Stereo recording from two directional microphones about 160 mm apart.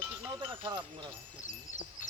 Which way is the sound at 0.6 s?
30° right (ahead or behind).